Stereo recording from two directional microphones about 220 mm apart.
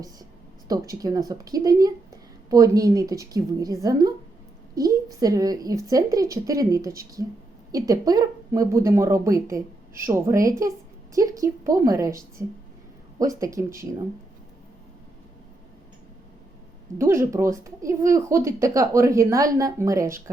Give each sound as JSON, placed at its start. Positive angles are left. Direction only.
{"t": 0.7, "sound": "speech", "side_deg": -15}
{"t": 17.0, "sound": "speech", "side_deg": -15}